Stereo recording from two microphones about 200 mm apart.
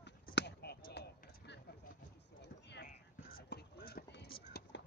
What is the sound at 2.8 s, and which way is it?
Clip-clop, 45° left (ahead or behind).